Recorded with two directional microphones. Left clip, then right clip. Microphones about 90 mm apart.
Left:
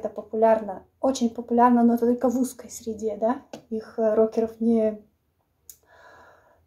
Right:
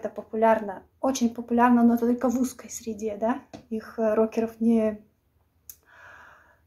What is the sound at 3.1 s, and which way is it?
Speech, 40° right (ahead or behind).